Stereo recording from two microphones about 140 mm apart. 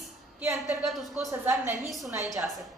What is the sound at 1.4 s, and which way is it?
Speech, 15° right (ahead or behind).